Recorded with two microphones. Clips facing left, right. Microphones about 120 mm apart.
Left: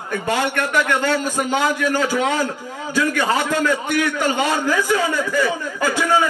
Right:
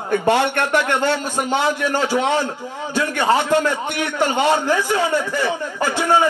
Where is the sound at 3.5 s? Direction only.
35° right (ahead or behind).